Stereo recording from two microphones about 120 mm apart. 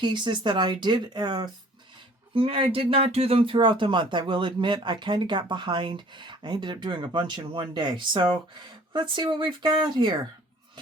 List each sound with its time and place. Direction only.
0.0 s speech: 40° right (ahead or behind)
2.3 s speech: 50° right (ahead or behind)